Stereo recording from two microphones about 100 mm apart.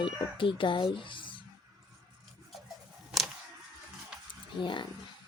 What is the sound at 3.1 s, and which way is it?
Single-lens reflex camera, 5° right (ahead or behind).